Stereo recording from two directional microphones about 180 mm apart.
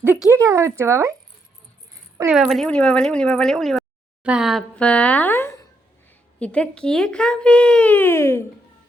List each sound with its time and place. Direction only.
0.0 s speech: 10° right (ahead or behind)
2.3 s speech: centre (ahead or behind); by 8.4 s 15° left (ahead or behind)